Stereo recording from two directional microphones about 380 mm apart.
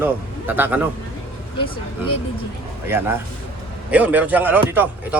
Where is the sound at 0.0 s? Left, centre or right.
Centre.